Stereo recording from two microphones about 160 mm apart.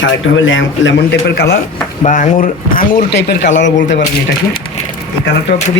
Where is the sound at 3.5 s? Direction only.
50° left (ahead or behind).